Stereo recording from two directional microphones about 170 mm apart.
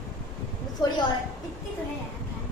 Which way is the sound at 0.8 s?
25° left (ahead or behind).